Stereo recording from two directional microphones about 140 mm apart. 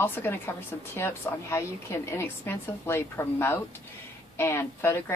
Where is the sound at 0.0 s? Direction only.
15° left (ahead or behind).